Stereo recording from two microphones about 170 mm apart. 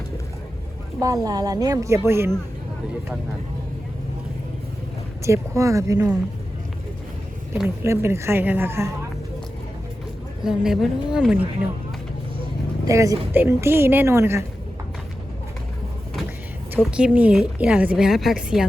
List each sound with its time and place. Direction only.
0.9 s speech: 20° right (ahead or behind)
5.2 s speech: 15° right (ahead or behind)
7.9 s speech: 15° right (ahead or behind)
10.4 s a woman's voice: 5° right (ahead or behind)
12.8 s speech: 20° right (ahead or behind)
16.8 s a woman's voice: 5° right (ahead or behind)